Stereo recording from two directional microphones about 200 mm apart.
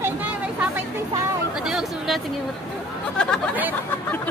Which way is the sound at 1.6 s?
Centre (ahead or behind).